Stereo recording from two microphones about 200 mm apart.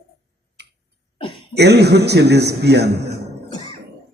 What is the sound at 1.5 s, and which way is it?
A man's voice, 55° right (ahead or behind).